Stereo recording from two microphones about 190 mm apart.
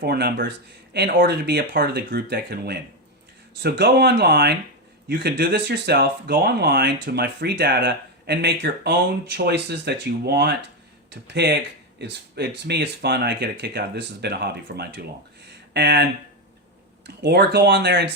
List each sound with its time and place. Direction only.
0.0 s speech: 55° right (ahead or behind)
17.2 s speech: 60° right (ahead or behind)